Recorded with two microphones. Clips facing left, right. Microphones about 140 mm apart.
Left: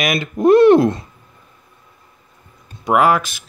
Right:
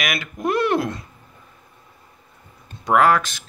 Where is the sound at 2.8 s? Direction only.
10° left (ahead or behind).